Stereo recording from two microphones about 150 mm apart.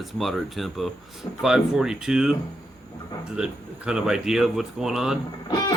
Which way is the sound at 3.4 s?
5° right (ahead or behind).